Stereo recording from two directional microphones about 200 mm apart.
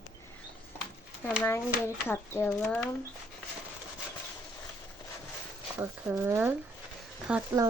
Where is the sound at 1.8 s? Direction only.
10° left (ahead or behind).